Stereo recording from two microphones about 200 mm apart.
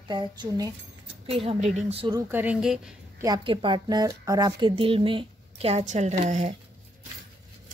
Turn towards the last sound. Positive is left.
turn(degrees=-35)  # may be behind; listen again after turning